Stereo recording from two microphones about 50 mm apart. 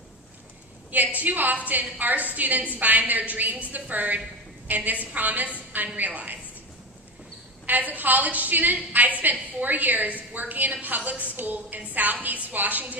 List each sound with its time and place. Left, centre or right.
0.9 s a woman's voice: right
7.6 s a woman's voice: right